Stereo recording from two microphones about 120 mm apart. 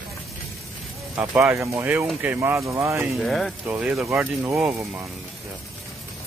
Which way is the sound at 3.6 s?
15° right (ahead or behind).